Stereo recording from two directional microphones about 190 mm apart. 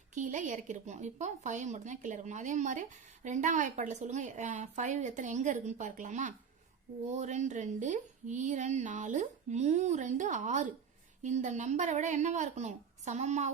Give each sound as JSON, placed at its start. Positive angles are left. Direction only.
{"t": 0.1, "sound": "speech", "side_deg": -40}